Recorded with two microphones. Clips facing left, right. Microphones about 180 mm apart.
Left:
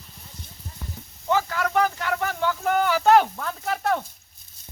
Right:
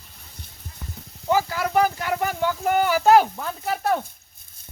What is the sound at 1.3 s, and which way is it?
Speech, 10° right (ahead or behind).